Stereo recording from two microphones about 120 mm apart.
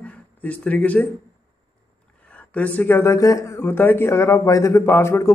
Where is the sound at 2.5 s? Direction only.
15° left (ahead or behind).